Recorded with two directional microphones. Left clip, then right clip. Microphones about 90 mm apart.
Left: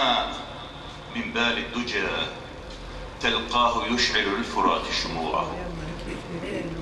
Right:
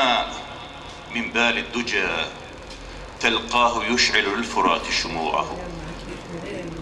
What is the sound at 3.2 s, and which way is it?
A man's voice, 30° right (ahead or behind).